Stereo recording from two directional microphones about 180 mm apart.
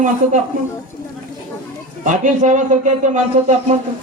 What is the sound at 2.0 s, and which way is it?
Speech, 45° right (ahead or behind).